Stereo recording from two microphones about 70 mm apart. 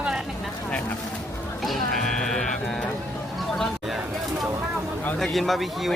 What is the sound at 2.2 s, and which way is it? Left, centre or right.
Speech, centre.